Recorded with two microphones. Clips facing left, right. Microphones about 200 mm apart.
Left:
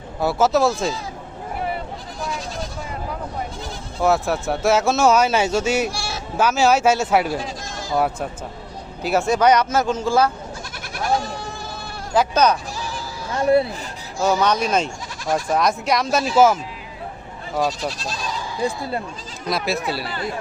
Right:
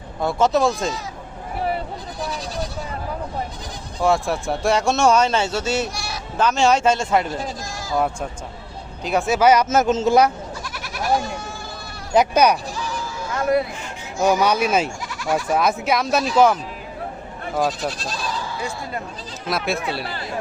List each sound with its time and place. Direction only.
0.2 s speech: 5° left (ahead or behind)
4.0 s speech: centre (ahead or behind)
5.9 s a sound: 30° left (ahead or behind)
6.3 s speech: 5° left (ahead or behind)
9.0 s speech: centre (ahead or behind)
9.6 s speech: 20° right (ahead or behind)
12.1 s speech: 15° right (ahead or behind)
12.7 s a sound: 35° left (ahead or behind)
14.2 s speech: 10° right (ahead or behind)
18.6 s speech: 30° left (ahead or behind)
19.5 s speech: centre (ahead or behind)